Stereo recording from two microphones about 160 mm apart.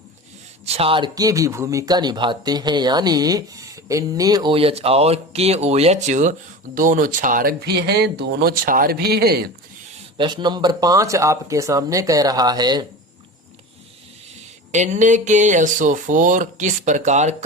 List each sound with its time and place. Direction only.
0.6 s speech: 40° right (ahead or behind); by 4.5 s 25° right (ahead or behind)
4.5 s speech: 35° right (ahead or behind); by 9.5 s 80° right
10.2 s speech: 30° right (ahead or behind)
14.7 s speech: 50° right (ahead or behind)